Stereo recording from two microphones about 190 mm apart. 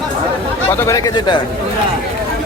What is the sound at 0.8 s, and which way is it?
Speech, 20° left (ahead or behind).